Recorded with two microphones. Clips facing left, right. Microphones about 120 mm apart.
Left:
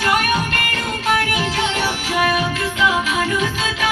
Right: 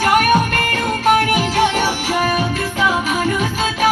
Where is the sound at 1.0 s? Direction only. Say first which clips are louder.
Right 5 dB; 45° right (ahead or behind).